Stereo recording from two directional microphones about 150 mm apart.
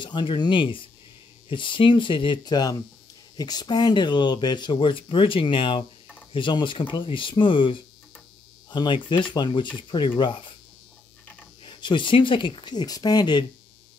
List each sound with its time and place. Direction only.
0.0 s speech: 30° left (ahead or behind)
11.6 s speech: 35° left (ahead or behind)